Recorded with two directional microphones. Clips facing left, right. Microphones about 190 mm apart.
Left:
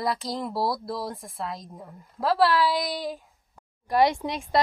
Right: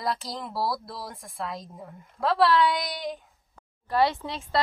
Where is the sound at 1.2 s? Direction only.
Centre (ahead or behind).